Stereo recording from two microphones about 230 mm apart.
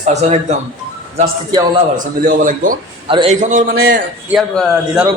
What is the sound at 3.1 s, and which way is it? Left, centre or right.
Speech, right.